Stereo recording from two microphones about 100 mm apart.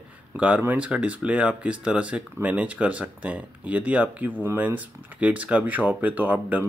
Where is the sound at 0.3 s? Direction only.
15° right (ahead or behind).